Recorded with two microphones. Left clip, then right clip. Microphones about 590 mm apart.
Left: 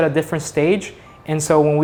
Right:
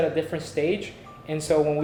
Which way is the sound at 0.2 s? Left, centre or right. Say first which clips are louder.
Left 7 dB; left.